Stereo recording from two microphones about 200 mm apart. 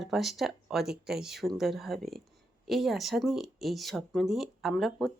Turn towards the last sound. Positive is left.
turn(degrees=0)  # may be behind; listen again after turning